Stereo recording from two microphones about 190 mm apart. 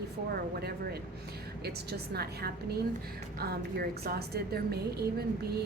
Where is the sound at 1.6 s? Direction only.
55° right (ahead or behind).